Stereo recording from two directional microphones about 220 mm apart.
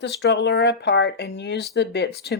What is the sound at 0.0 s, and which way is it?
Speech, 50° left (ahead or behind).